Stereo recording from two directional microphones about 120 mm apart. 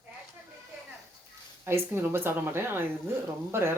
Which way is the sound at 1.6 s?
20° right (ahead or behind).